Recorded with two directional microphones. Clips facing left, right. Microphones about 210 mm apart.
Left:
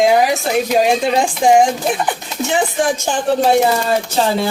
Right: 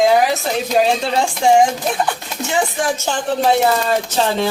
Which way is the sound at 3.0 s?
15° left (ahead or behind).